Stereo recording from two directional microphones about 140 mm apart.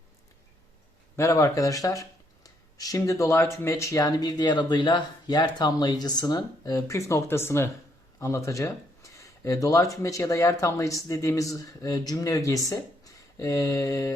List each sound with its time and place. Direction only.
1.1 s speech: 20° left (ahead or behind)